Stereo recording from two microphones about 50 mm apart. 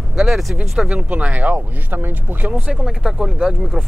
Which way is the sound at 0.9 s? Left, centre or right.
Right.